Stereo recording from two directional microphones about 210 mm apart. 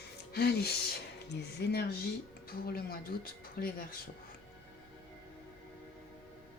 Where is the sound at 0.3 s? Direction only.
50° left (ahead or behind).